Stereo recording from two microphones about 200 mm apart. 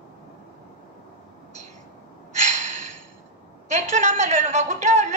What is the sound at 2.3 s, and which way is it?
Gasp, 35° right (ahead or behind).